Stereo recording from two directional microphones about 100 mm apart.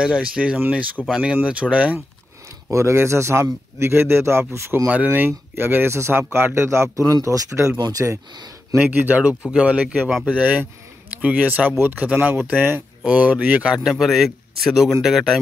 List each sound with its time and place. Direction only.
0.0 s speech: 10° right (ahead or behind)
2.7 s speech: 25° right (ahead or behind)
8.7 s speech: 20° right (ahead or behind)